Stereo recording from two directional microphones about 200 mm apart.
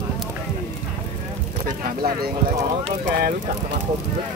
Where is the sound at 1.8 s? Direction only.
45° right (ahead or behind).